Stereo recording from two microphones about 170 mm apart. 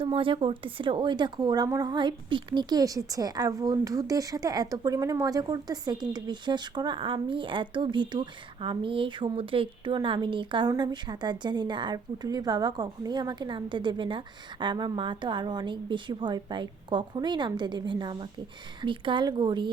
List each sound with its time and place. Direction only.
0.0 s a woman's voice: 30° right (ahead or behind)